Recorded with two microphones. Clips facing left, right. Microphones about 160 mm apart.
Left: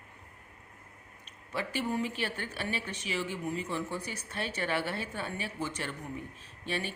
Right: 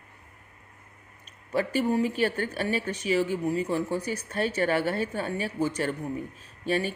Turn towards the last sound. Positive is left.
turn(degrees=-40)  # may be behind; listen again after turning